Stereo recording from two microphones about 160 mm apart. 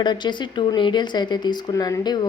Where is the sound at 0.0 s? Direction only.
30° left (ahead or behind).